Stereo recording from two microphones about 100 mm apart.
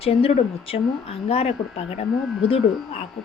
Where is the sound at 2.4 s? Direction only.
75° left (ahead or behind).